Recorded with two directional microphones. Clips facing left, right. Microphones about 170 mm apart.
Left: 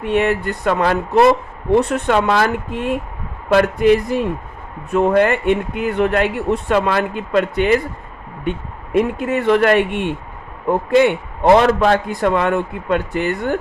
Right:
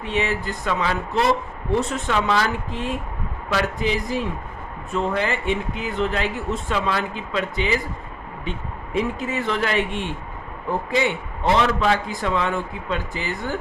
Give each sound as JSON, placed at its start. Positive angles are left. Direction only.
{"t": 0.0, "sound": "speech", "side_deg": 60}